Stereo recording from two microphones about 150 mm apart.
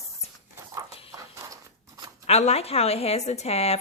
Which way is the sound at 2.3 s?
45° left (ahead or behind).